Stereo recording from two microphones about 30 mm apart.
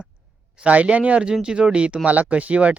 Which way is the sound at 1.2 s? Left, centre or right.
Right.